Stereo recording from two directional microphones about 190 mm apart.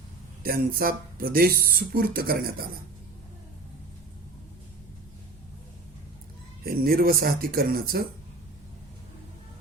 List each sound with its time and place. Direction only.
0.4 s speech: 50° right (ahead or behind)
6.7 s speech: 50° right (ahead or behind)